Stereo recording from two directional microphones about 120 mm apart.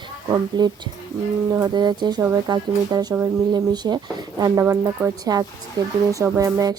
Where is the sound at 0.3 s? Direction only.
35° right (ahead or behind).